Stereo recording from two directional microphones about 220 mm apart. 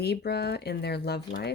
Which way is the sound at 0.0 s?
45° left (ahead or behind).